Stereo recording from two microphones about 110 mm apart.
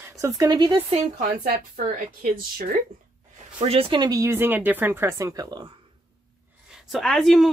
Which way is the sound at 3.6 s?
65° right (ahead or behind).